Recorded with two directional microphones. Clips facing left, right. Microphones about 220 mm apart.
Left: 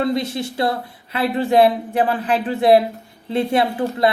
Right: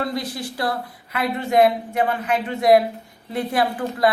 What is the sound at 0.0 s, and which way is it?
Speech, 25° left (ahead or behind).